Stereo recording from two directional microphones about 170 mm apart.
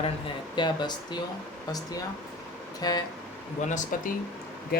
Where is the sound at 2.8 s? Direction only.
25° left (ahead or behind).